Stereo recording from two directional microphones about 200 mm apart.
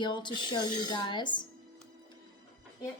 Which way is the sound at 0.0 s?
20° left (ahead or behind).